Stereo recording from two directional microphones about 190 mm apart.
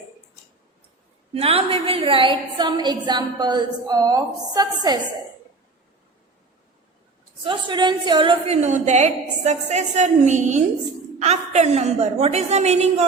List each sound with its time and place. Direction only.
1.3 s a woman's voice: 30° right (ahead or behind)
7.4 s a woman's voice: 25° right (ahead or behind)